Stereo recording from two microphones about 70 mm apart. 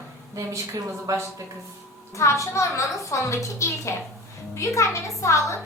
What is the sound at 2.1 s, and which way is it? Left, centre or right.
A woman's voice, left.